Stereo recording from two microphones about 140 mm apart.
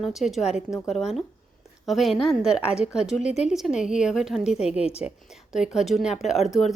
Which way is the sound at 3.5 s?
5° right (ahead or behind).